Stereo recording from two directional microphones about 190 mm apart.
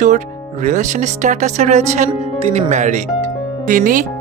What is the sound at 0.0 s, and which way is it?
Speech, 40° right (ahead or behind).